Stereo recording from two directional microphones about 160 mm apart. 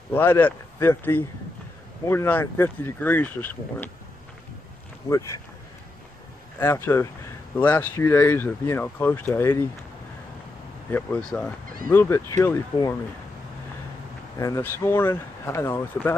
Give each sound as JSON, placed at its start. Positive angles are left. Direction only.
{"t": 0.1, "sound": "speech", "side_deg": 15}
{"t": 5.1, "sound": "speech", "side_deg": 15}
{"t": 6.6, "sound": "speech", "side_deg": 15}
{"t": 10.9, "sound": "speech", "side_deg": 10}
{"t": 14.4, "sound": "speech", "side_deg": 15}